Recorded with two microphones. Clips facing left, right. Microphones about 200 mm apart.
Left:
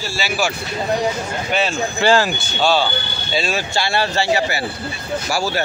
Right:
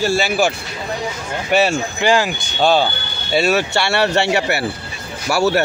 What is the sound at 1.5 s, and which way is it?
Speech, 65° right (ahead or behind).